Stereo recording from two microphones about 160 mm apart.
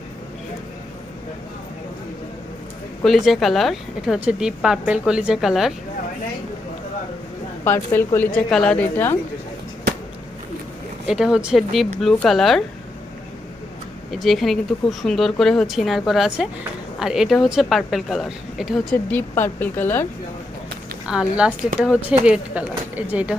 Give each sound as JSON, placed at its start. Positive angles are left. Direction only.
{"t": 3.0, "sound": "speech", "side_deg": 0}
{"t": 7.6, "sound": "speech", "side_deg": 15}
{"t": 11.0, "sound": "speech", "side_deg": -5}
{"t": 14.1, "sound": "speech", "side_deg": 0}
{"t": 19.1, "sound": "speech", "side_deg": 15}
{"t": 21.1, "sound": "a woman's voice", "side_deg": -5}